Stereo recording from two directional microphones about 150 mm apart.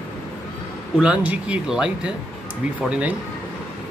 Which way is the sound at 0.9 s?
5° right (ahead or behind).